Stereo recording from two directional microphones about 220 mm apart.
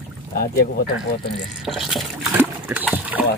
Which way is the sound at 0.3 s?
45° left (ahead or behind).